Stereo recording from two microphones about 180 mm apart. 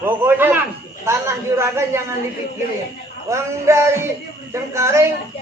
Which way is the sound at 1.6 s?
15° right (ahead or behind).